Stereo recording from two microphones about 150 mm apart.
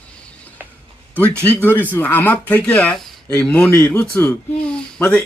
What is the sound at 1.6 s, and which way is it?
Speech, 15° left (ahead or behind).